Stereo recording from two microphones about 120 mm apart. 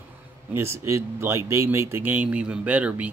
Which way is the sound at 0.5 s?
20° right (ahead or behind).